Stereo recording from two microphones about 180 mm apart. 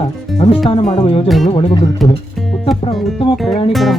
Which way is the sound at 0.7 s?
30° left (ahead or behind).